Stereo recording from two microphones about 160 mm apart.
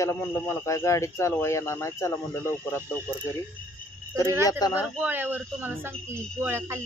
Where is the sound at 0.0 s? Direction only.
20° left (ahead or behind).